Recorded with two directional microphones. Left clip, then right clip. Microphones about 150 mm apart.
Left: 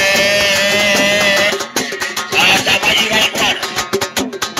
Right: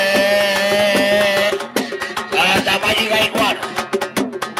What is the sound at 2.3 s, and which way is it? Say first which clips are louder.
Music: left 3 dB; 50° right (ahead or behind).